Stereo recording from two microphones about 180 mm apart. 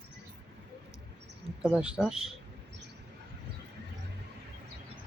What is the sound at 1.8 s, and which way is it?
Speech, 5° right (ahead or behind).